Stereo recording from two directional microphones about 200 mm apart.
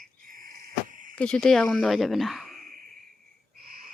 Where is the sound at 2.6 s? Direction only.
45° right (ahead or behind).